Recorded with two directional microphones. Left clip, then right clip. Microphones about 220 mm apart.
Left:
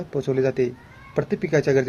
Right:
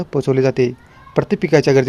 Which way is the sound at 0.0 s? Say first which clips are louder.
Right 6 dB; 45° right (ahead or behind).